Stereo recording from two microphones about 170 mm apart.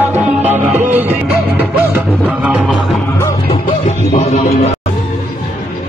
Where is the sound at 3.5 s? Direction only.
40° left (ahead or behind).